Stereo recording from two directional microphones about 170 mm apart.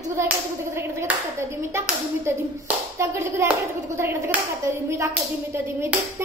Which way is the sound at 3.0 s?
15° right (ahead or behind).